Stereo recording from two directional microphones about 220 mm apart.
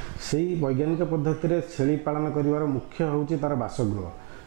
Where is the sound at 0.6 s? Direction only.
25° right (ahead or behind).